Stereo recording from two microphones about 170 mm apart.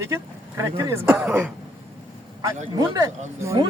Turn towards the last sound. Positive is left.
turn(degrees=-20)  # may be behind; listen again after turning